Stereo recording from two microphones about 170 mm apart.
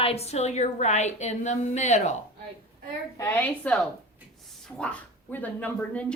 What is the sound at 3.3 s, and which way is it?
Speech, 10° left (ahead or behind).